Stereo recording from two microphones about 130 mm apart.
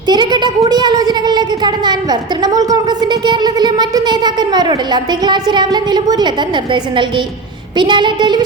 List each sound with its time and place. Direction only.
0.1 s speech: 35° right (ahead or behind)